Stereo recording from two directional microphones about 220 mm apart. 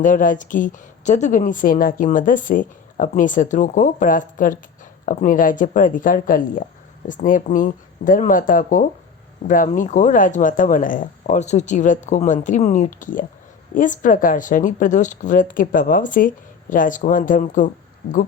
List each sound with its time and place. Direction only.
0.0 s a woman's voice: 35° left (ahead or behind)